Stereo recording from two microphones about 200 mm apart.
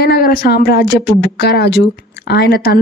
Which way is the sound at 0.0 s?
50° left (ahead or behind).